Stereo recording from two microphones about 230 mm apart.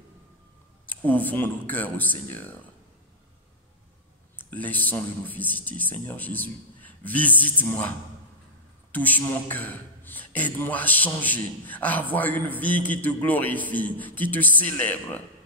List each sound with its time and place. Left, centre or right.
0.8 s a man's voice: centre
4.4 s a man's voice: centre
8.9 s a man's voice: centre